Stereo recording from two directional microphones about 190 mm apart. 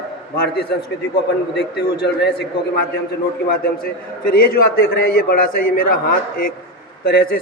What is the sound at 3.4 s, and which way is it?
A man's voice, 50° left (ahead or behind).